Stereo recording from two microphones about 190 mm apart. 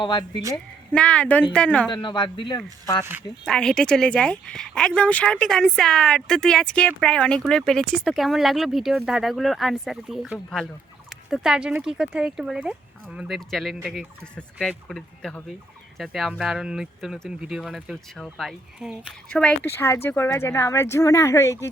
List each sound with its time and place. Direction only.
0.0 s speech: 25° left (ahead or behind)
0.9 s speech: 5° left (ahead or behind)
1.9 s speech: 25° left (ahead or behind)
3.4 s speech: 5° left (ahead or behind)